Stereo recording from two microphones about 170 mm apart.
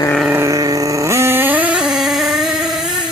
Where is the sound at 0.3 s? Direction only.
15° right (ahead or behind).